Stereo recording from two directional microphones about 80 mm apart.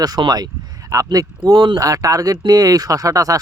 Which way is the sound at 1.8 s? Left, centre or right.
Right.